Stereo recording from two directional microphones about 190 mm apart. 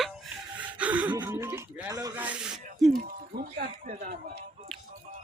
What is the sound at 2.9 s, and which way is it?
Speech, 50° right (ahead or behind).